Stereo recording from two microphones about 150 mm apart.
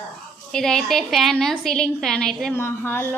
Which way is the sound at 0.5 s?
5° left (ahead or behind).